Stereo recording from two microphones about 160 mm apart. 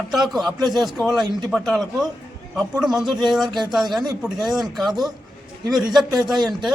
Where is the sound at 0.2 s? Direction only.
Centre (ahead or behind).